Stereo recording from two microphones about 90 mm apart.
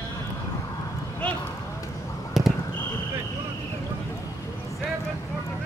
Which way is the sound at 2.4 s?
5° right (ahead or behind).